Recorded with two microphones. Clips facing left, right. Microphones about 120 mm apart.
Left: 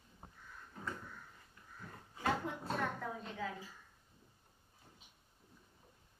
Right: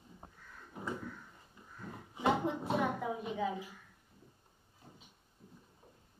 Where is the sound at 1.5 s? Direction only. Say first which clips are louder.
Right 6 dB; 20° right (ahead or behind).